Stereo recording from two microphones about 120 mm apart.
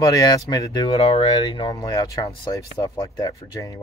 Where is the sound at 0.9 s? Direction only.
55° left (ahead or behind).